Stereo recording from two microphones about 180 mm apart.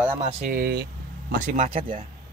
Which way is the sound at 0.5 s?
55° right (ahead or behind).